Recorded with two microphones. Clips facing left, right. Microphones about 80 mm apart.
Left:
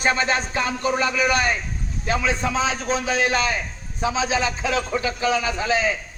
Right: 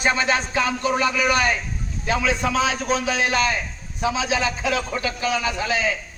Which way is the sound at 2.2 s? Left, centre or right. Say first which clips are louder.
Right 2 dB; left.